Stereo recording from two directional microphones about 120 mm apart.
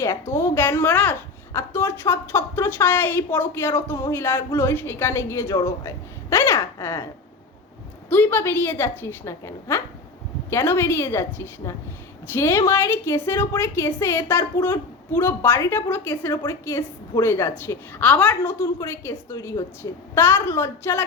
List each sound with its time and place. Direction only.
0.0 s a woman's voice: 20° left (ahead or behind)
8.1 s a woman's voice: 15° left (ahead or behind)
18.0 s a woman's voice: 10° left (ahead or behind)